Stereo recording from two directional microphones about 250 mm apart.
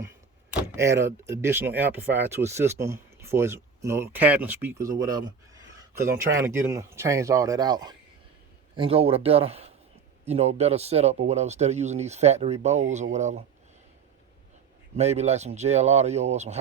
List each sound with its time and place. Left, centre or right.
0.7 s speech: centre; by 13.4 s right
14.9 s speech: right